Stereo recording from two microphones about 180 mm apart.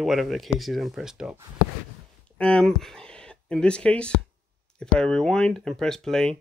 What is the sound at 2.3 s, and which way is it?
Speech, 5° left (ahead or behind).